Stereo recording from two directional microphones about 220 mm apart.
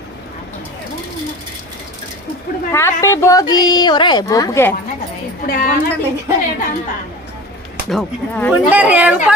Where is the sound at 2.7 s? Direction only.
10° left (ahead or behind).